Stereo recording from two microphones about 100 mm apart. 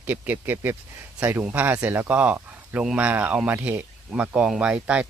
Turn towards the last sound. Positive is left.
turn(degrees=-10)  # may be behind; listen again after turning